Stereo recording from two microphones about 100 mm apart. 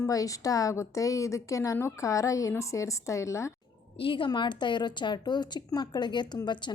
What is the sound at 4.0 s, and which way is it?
A woman's voice, 60° left (ahead or behind).